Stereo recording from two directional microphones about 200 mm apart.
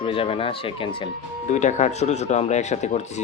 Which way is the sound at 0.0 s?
25° left (ahead or behind).